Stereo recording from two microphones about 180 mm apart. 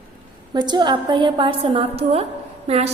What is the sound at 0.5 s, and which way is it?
A woman's voice, 25° right (ahead or behind).